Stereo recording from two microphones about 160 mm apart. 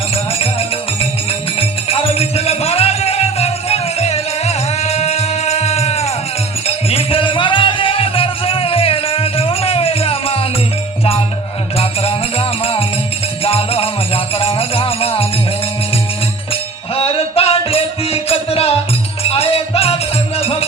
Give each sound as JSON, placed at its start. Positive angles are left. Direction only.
{"t": 1.5, "sound": "music", "side_deg": 35}
{"t": 11.8, "sound": "music", "side_deg": 40}
{"t": 16.9, "sound": "music", "side_deg": 35}